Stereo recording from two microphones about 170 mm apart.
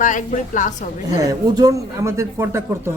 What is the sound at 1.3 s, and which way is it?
Speech, 20° right (ahead or behind).